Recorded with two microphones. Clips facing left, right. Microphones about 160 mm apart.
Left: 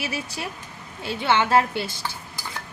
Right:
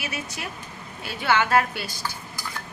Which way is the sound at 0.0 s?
30° left (ahead or behind).